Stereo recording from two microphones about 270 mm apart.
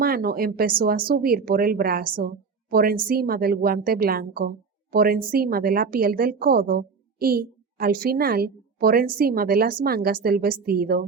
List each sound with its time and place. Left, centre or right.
0.0 s a woman's voice: right